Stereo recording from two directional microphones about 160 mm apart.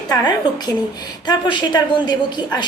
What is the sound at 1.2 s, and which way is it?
A woman's voice, 30° left (ahead or behind).